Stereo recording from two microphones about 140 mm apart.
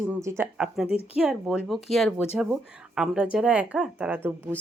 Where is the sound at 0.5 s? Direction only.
5° right (ahead or behind).